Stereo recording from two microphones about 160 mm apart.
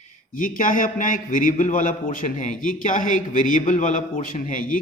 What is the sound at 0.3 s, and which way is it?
A man's voice, 55° left (ahead or behind).